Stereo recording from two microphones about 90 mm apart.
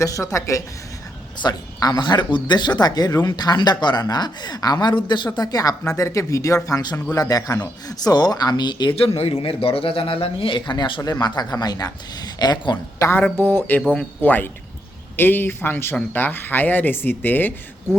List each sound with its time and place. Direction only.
0.0 s speech: 35° left (ahead or behind)
1.4 s speech: 50° left (ahead or behind)
5.4 s speech: 45° left (ahead or behind)
9.0 s a man's voice: 90° left; by 11.0 s 60° left (ahead or behind)
11.0 s speech: 50° left (ahead or behind)
13.0 s speech: 30° left (ahead or behind)